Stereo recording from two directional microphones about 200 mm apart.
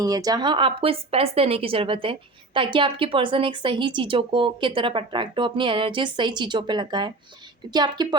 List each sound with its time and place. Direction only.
0.0 s speech: 20° right (ahead or behind)